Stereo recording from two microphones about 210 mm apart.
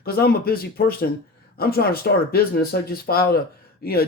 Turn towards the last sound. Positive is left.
turn(degrees=45)  # may be behind; listen again after turning